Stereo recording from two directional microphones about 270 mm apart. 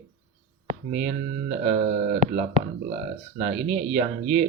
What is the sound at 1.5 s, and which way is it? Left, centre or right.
Speech, right.